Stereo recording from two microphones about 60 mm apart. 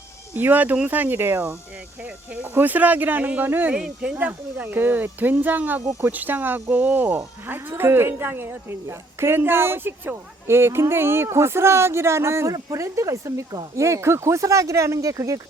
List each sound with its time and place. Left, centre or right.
0.3 s speech: right
2.0 s a woman's voice: right
12.5 s speech: right